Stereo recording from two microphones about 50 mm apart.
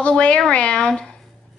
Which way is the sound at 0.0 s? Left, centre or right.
Left.